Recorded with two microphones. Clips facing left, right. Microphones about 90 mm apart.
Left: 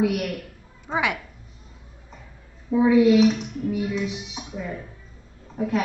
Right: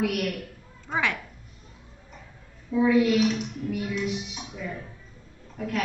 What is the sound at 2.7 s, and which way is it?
A woman's voice, 25° left (ahead or behind).